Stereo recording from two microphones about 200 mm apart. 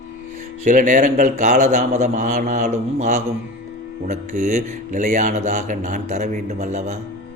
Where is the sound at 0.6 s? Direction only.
40° right (ahead or behind).